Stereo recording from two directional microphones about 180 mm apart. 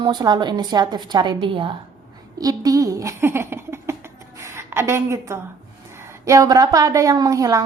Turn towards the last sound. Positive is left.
turn(degrees=-20)  # may be behind; listen again after turning